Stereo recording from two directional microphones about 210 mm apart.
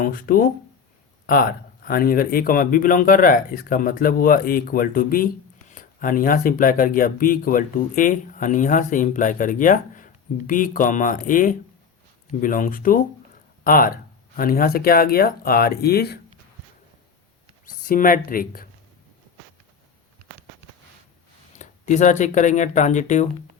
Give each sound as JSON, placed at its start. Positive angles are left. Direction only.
{"t": 0.0, "sound": "speech", "side_deg": 40}
{"t": 17.7, "sound": "speech", "side_deg": 40}
{"t": 21.6, "sound": "speech", "side_deg": 35}